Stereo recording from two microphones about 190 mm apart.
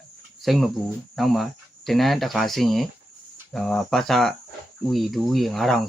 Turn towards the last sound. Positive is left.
turn(degrees=0)  # may be behind; listen again after turning